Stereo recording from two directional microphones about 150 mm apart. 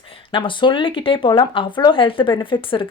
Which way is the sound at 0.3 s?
35° left (ahead or behind).